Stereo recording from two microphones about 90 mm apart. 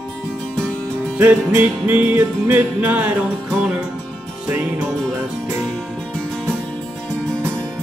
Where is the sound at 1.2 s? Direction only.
20° right (ahead or behind).